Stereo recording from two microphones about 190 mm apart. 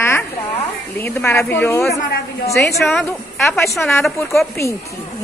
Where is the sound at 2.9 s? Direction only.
Centre (ahead or behind).